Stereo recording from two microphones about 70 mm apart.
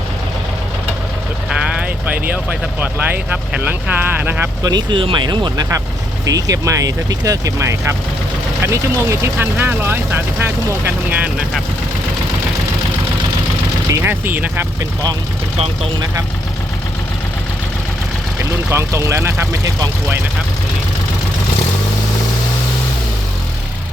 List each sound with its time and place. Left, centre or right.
1.5 s speech: centre
4.6 s speech: right
6.2 s speech: right
9.4 s speech: right
14.0 s speech: right
18.7 s speech: right